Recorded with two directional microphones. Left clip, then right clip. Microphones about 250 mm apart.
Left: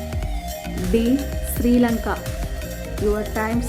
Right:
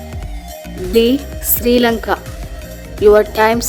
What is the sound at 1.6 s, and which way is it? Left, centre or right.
Speech, right.